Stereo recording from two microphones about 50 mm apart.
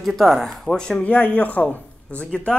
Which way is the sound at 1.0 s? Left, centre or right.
Left.